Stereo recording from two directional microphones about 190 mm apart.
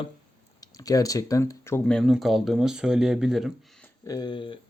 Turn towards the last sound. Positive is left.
turn(degrees=25)  # may be behind; listen again after turning